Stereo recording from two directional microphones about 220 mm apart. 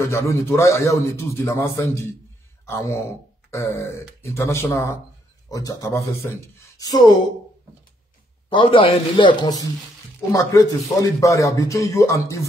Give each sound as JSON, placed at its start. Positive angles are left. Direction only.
{"t": 0.0, "sound": "a man's voice", "side_deg": 15}
{"t": 8.5, "sound": "a man's voice", "side_deg": 25}